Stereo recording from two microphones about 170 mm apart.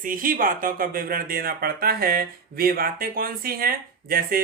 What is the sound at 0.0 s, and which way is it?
Speech, 55° right (ahead or behind).